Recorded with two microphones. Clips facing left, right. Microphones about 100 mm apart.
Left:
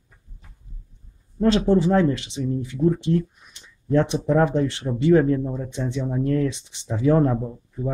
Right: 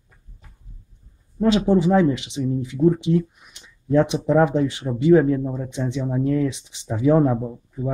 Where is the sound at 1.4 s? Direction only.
10° right (ahead or behind).